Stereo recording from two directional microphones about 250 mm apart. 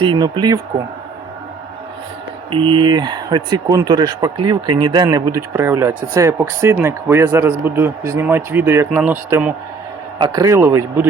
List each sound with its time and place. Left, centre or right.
0.0 s speech: centre
2.5 s speech: centre